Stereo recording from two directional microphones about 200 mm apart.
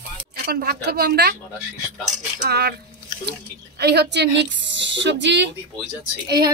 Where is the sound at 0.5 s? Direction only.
50° right (ahead or behind).